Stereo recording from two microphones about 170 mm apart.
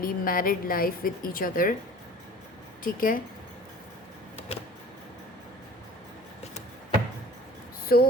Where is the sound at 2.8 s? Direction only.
55° left (ahead or behind).